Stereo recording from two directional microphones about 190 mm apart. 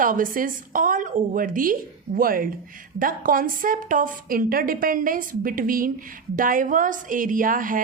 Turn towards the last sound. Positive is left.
turn(degrees=-45)  # may be behind; listen again after turning